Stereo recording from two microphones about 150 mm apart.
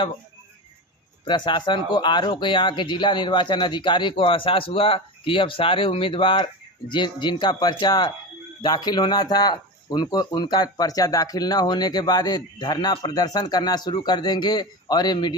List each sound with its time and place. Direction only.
1.2 s speech: 30° left (ahead or behind)